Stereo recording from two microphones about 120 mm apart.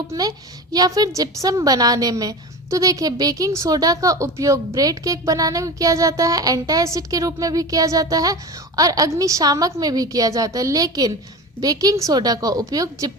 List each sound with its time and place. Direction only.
0.1 s a woman's voice: 30° right (ahead or behind)